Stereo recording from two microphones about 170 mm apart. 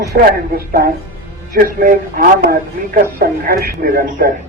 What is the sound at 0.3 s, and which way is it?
Speech, 60° right (ahead or behind).